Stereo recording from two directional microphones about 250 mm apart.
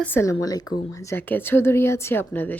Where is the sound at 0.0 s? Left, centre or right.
Centre.